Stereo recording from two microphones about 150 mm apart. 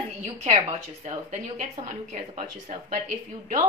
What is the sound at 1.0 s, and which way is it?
Speech, 55° right (ahead or behind).